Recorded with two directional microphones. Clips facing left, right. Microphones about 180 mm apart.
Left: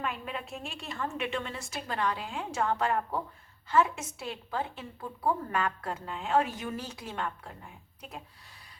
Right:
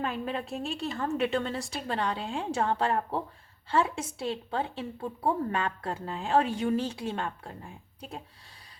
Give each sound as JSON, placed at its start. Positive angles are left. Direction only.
{"t": 0.0, "sound": "a woman's voice", "side_deg": -35}